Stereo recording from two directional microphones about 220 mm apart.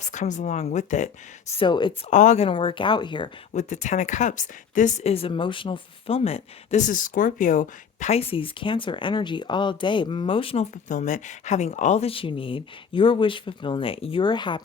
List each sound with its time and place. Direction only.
0.0 s speech: 35° left (ahead or behind)
1.5 s speech: 20° left (ahead or behind)
2.0 s speech: 35° left (ahead or behind)
3.5 s speech: 30° left (ahead or behind)